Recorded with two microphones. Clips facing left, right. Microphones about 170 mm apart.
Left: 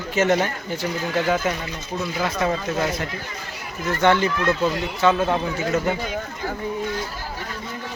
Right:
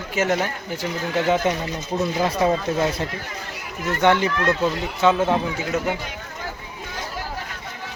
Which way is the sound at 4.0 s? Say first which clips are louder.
Even; 15° right (ahead or behind).